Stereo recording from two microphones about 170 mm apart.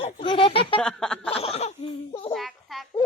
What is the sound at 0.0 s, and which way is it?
Speech, 30° left (ahead or behind).